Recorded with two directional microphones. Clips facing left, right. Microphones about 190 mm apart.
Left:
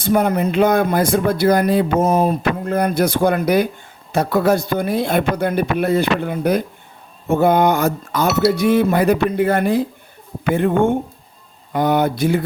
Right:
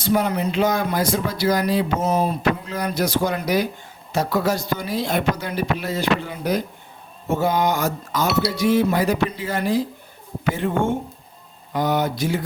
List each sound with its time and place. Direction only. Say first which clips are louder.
0.0 s speech: left 4 dB; 50° left (ahead or behind)